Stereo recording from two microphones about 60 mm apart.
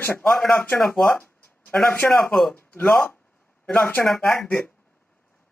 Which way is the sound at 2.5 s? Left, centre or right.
Left.